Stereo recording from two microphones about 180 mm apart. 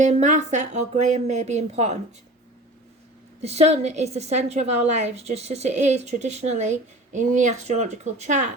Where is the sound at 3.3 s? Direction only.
35° right (ahead or behind).